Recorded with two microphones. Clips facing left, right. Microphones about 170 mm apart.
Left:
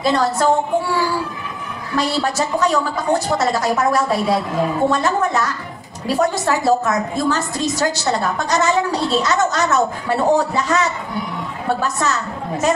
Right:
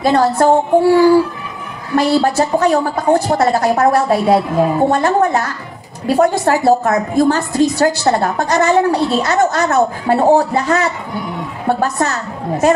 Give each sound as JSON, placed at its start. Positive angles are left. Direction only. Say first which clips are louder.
{"t": 0.0, "sound": "a woman's voice", "louder": "right 5 dB", "side_deg": -55}
{"t": 2.0, "sound": "a woman's voice", "louder": "right 7 dB", "side_deg": -55}